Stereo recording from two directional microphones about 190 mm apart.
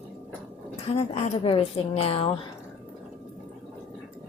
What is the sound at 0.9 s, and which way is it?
A woman's voice, 30° left (ahead or behind).